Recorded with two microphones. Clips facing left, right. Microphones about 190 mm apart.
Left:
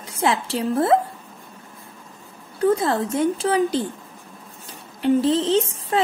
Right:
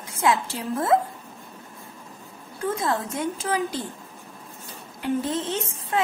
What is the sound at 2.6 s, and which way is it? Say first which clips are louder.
A woman's voice: left 7 dB; 30° left (ahead or behind).